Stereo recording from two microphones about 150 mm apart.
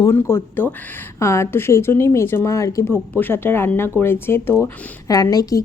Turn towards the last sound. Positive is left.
turn(degrees=25)  # may be behind; listen again after turning